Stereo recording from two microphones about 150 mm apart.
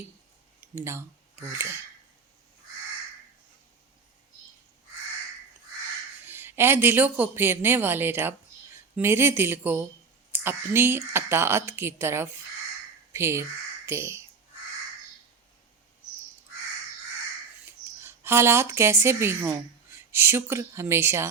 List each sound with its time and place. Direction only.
0.8 s speech: 20° right (ahead or behind)
6.2 s speech: 15° right (ahead or behind)
18.0 s speech: 15° right (ahead or behind)